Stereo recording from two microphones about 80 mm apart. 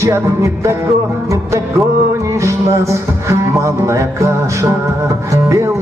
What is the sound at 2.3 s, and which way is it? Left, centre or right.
Music, right.